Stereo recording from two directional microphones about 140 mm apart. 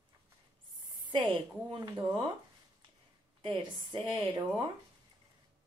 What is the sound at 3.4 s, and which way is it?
Speech, 35° right (ahead or behind).